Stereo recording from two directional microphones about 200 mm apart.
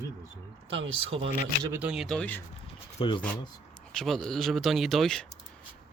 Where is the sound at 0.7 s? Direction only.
25° right (ahead or behind).